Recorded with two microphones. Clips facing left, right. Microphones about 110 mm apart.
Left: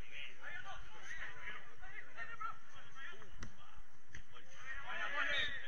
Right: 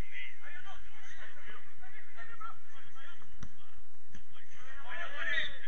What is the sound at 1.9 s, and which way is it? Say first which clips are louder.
Chatter: left 2 dB; centre (ahead or behind).